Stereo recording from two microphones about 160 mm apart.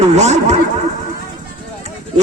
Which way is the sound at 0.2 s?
45° right (ahead or behind).